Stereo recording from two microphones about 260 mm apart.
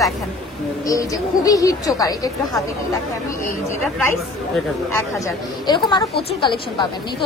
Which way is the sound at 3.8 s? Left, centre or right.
Centre.